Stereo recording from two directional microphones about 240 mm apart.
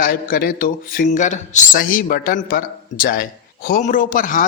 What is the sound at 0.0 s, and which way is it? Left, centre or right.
Speech, left.